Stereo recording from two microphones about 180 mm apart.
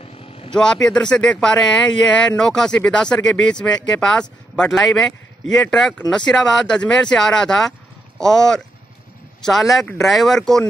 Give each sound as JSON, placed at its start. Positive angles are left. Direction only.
{"t": 0.0, "sound": "vehicle", "side_deg": 30}
{"t": 0.5, "sound": "speech", "side_deg": 5}